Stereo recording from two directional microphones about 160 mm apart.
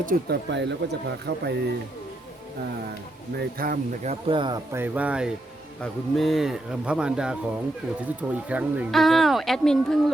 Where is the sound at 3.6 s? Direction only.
65° right (ahead or behind).